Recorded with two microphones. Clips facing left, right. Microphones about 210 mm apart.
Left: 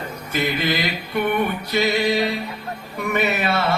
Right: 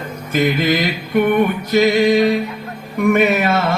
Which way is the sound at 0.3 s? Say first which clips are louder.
Right 6 dB; 50° right (ahead or behind).